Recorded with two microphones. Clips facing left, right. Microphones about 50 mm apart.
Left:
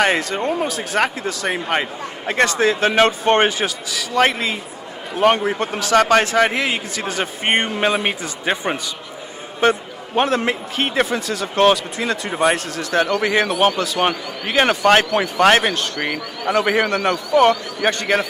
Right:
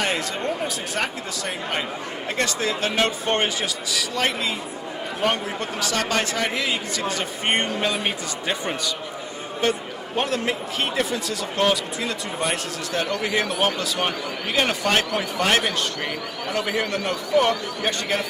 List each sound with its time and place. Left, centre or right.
0.2 s a man's voice: left
4.2 s a man's voice: left
10.2 s speech: left
13.7 s speech: left
16.0 s speech: left
16.6 s a man's voice: left